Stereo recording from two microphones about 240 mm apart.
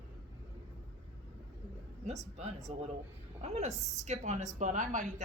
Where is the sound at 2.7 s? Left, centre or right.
Right.